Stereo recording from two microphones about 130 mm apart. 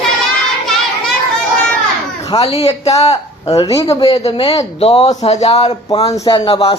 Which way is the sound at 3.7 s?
25° left (ahead or behind).